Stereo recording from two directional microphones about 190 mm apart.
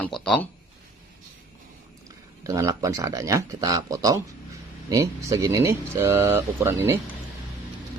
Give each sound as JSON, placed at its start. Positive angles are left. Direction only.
{"t": 2.4, "sound": "speech", "side_deg": -15}